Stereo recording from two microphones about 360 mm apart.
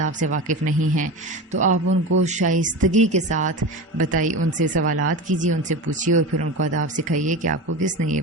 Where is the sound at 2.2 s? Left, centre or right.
Centre.